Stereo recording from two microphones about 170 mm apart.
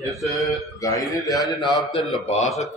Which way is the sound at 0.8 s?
20° left (ahead or behind).